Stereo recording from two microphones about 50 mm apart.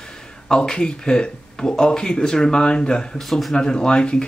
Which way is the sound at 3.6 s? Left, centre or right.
Centre.